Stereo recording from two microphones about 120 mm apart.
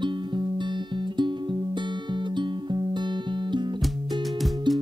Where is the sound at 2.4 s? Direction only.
40° right (ahead or behind).